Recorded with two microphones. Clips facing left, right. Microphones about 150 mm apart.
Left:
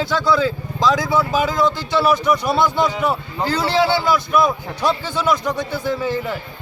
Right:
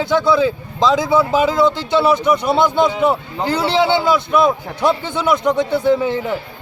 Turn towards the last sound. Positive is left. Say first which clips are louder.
# right 5 dB
turn(degrees=-20)  # may be behind; listen again after turning